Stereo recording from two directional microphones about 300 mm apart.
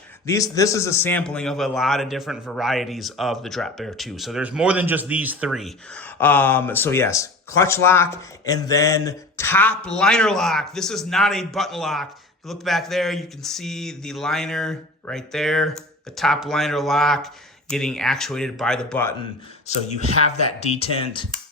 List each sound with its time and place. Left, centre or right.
0.3 s a man's voice: centre
19.6 s speech: left